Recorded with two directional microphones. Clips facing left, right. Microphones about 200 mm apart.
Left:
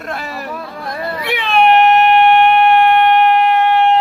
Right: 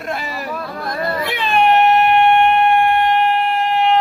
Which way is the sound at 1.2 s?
70° left (ahead or behind).